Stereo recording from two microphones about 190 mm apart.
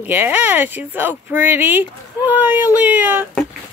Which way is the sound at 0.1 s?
10° right (ahead or behind).